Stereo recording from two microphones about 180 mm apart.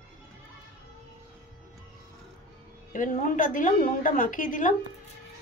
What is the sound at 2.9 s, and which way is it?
A woman's voice, 45° left (ahead or behind).